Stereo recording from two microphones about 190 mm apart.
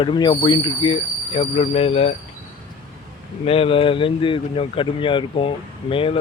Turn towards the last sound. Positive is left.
turn(degrees=30)  # may be behind; listen again after turning